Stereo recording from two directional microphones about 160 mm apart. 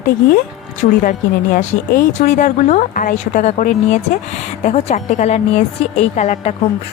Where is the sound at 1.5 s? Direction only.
50° left (ahead or behind).